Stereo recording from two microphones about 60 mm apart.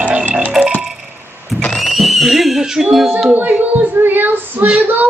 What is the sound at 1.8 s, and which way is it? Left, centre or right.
Neigh, centre.